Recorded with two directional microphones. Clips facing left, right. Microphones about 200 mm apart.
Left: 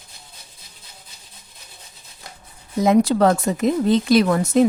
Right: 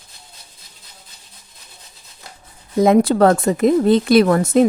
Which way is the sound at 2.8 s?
55° right (ahead or behind).